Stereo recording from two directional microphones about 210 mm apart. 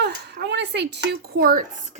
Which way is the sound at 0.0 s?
55° right (ahead or behind).